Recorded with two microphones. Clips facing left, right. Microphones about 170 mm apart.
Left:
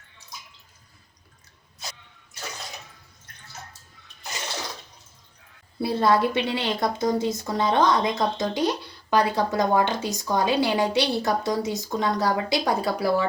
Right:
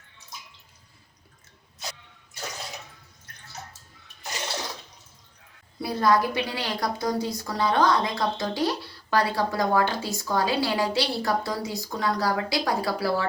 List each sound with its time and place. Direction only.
5.8 s a woman's voice: 25° left (ahead or behind)